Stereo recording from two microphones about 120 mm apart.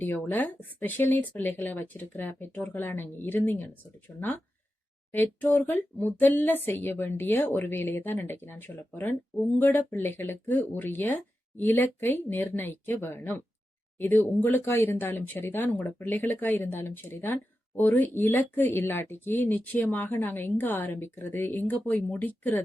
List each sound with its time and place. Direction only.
0.3 s speech: 15° left (ahead or behind)
5.1 s speech: 15° left (ahead or behind)